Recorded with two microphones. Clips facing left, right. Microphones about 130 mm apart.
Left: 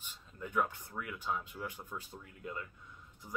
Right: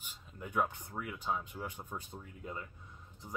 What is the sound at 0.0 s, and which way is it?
Speech, 15° right (ahead or behind).